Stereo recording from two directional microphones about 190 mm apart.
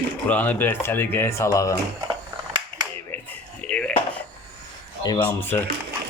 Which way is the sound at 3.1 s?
10° left (ahead or behind).